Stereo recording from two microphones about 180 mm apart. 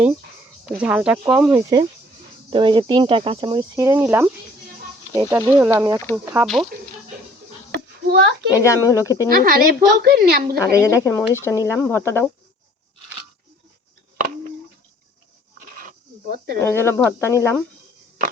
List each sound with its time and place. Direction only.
0.6 s speech: 5° right (ahead or behind)
2.5 s speech: 25° right (ahead or behind)
6.4 s speech: centre (ahead or behind)
7.7 s a sound: 75° right (ahead or behind)
8.5 s speech: 15° left (ahead or behind)
9.3 s a woman's voice: 55° right (ahead or behind)
10.8 s speech: 15° left (ahead or behind)
15.5 s a sound: 50° right (ahead or behind)
16.6 s speech: 15° left (ahead or behind)